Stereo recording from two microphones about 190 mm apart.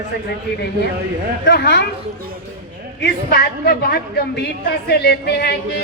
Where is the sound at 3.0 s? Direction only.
55° left (ahead or behind).